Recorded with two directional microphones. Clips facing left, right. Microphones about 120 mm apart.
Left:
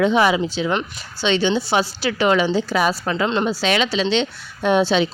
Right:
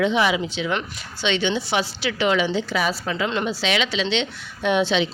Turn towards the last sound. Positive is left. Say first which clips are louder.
# left 3 dB
turn(degrees=40)  # may be behind; listen again after turning